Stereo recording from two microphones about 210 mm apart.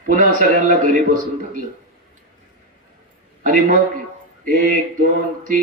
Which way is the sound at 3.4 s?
40° right (ahead or behind).